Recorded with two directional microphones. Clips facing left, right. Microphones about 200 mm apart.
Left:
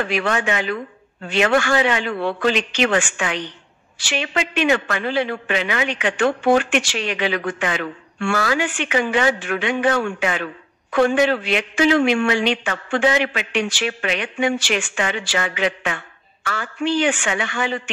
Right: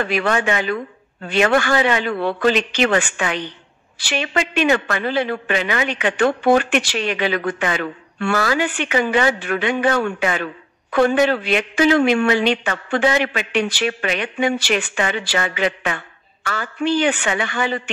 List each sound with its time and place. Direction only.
0.1 s a man's voice: 40° right (ahead or behind)